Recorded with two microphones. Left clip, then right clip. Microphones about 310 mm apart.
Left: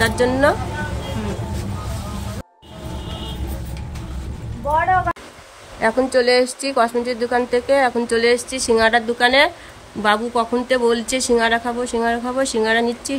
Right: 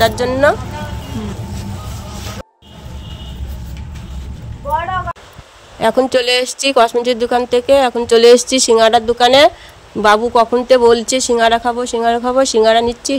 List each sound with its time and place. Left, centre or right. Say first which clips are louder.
0.0 s speech: right 4 dB; centre
5.8 s speech: right 4 dB; right